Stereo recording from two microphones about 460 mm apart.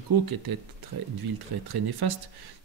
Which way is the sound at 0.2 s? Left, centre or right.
Right.